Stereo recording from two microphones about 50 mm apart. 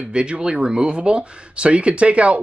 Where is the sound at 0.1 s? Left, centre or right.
Right.